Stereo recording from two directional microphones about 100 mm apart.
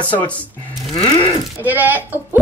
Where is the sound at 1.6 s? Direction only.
15° right (ahead or behind).